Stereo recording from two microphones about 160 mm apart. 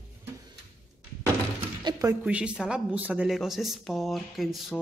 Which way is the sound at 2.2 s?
5° right (ahead or behind).